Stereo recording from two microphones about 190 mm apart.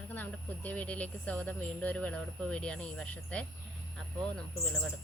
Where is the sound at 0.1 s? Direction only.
10° left (ahead or behind).